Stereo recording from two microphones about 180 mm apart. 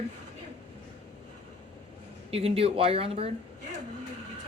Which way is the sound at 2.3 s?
35° right (ahead or behind).